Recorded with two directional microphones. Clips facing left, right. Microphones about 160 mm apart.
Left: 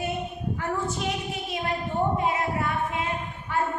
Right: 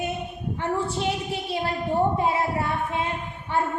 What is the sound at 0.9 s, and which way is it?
A woman's voice, 30° right (ahead or behind).